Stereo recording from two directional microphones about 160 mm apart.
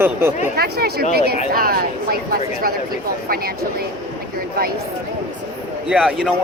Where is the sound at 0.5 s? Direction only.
80° right.